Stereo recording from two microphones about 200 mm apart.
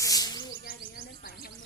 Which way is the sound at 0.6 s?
45° left (ahead or behind).